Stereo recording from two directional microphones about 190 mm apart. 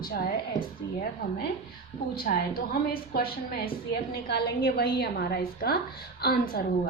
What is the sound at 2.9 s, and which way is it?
A woman's voice, 50° left (ahead or behind).